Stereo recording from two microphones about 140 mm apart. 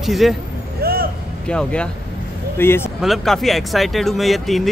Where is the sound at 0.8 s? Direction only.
90° right.